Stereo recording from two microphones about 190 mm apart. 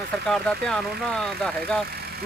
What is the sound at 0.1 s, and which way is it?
Speech, 5° left (ahead or behind).